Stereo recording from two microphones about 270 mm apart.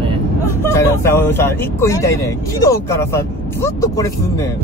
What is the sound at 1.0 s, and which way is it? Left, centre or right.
Speech, centre.